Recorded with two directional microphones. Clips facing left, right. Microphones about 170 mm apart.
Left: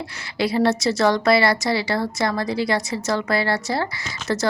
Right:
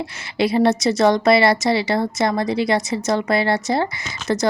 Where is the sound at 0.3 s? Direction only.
20° right (ahead or behind).